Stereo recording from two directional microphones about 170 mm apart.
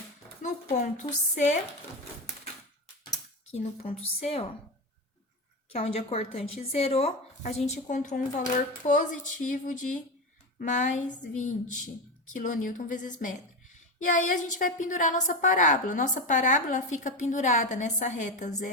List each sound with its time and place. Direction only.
0.4 s a woman's voice: 40° left (ahead or behind)
3.5 s speech: 40° left (ahead or behind)
5.7 s a woman's voice: 35° left (ahead or behind)
14.0 s a woman's voice: 50° left (ahead or behind)